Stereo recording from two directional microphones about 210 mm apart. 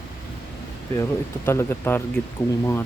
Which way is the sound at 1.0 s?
10° left (ahead or behind).